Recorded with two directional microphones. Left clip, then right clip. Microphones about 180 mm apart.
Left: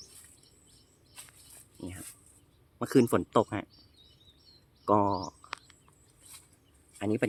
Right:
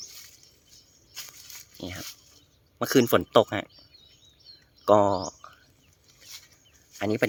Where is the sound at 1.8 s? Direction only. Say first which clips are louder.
Right 6 dB; 25° right (ahead or behind).